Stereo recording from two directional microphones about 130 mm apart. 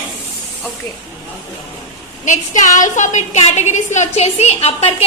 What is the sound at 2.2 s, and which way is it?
A woman's voice, 70° left (ahead or behind).